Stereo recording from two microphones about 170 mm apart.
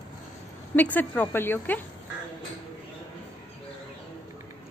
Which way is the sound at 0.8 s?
10° left (ahead or behind).